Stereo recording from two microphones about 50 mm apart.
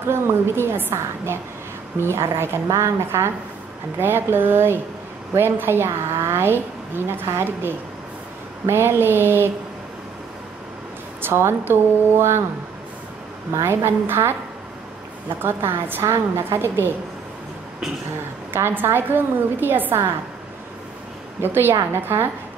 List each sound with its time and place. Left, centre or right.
0.0 s a woman's voice: right
4.0 s a woman's voice: right
5.9 s a woman's voice: right
11.1 s a woman's voice: right
13.7 s a woman's voice: right
15.4 s a woman's voice: right
18.5 s a woman's voice: right
21.4 s a woman's voice: right